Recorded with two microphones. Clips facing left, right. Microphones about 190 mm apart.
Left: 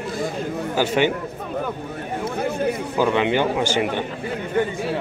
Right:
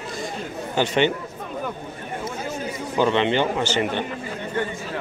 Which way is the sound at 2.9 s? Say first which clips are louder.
Right 1 dB; 10° left (ahead or behind).